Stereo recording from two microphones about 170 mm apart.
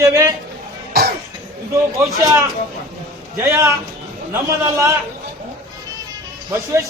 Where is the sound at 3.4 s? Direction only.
20° right (ahead or behind).